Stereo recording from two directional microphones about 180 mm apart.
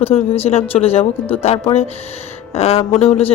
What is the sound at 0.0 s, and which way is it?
A woman's voice, 35° left (ahead or behind).